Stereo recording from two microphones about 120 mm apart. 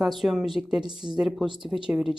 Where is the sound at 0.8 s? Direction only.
40° right (ahead or behind).